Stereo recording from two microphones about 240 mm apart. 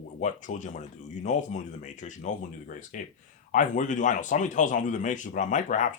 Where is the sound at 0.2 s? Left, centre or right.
Left.